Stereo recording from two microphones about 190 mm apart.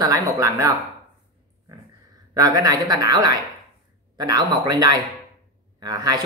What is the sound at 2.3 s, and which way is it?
Speech, 20° right (ahead or behind).